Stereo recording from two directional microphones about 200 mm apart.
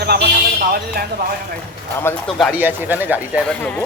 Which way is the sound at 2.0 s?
10° left (ahead or behind).